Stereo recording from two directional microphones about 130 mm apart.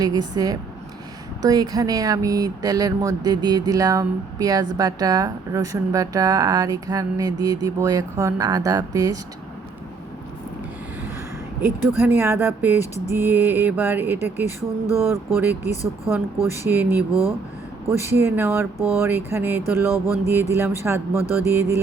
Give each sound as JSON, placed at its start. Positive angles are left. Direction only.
{"t": 0.0, "sound": "speech", "side_deg": -30}
{"t": 11.6, "sound": "speech", "side_deg": -15}
{"t": 17.1, "sound": "speech", "side_deg": 25}
{"t": 17.9, "sound": "speech", "side_deg": -20}